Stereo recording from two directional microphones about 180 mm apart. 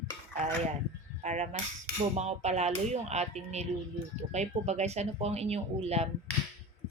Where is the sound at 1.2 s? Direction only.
40° right (ahead or behind).